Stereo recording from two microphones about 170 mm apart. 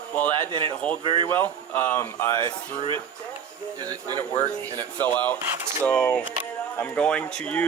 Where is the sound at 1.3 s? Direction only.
10° left (ahead or behind).